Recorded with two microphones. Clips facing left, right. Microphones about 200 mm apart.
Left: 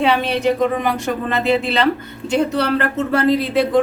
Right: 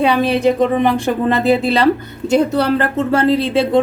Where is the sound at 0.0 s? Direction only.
30° right (ahead or behind).